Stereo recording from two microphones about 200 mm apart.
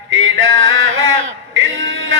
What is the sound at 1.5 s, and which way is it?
Music, 75° right (ahead or behind).